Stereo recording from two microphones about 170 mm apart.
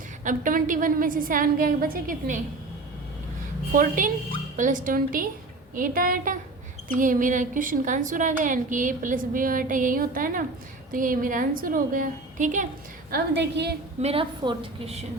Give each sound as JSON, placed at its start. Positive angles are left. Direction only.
{"t": 0.3, "sound": "a woman's voice", "side_deg": -50}
{"t": 3.7, "sound": "a woman's voice", "side_deg": -55}
{"t": 13.1, "sound": "a woman's voice", "side_deg": -75}
{"t": 14.0, "sound": "a woman's voice", "side_deg": -35}